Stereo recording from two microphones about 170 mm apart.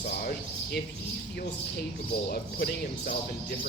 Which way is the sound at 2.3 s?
60° left (ahead or behind).